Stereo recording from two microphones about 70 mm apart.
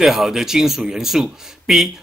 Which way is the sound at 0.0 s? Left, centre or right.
Centre.